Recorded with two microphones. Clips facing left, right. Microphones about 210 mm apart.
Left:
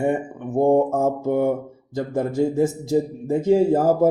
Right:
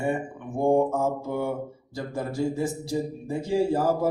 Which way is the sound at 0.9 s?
55° left (ahead or behind).